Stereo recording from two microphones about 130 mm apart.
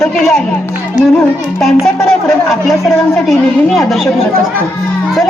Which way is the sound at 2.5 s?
Centre (ahead or behind).